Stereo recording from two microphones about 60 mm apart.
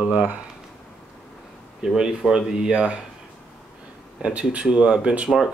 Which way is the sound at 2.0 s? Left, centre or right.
Centre.